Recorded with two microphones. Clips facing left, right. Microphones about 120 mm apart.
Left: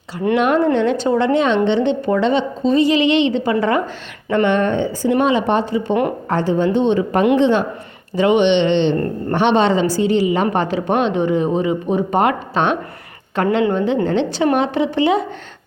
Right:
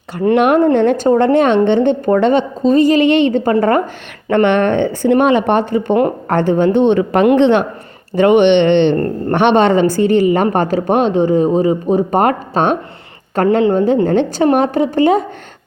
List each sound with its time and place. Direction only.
0.3 s speech: 55° right (ahead or behind)
4.3 s speech: 65° right (ahead or behind)
8.1 s speech: 55° right (ahead or behind)